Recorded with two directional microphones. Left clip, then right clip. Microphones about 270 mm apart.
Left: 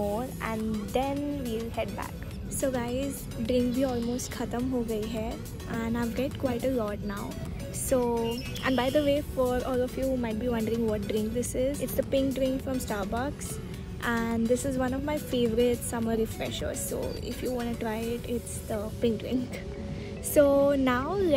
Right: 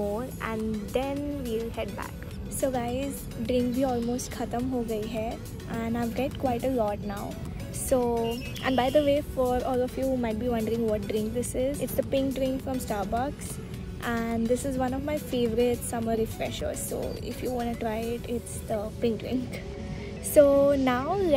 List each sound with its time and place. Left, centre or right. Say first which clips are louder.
0.1 s speech: even; centre
20.3 s speech: right 3 dB; centre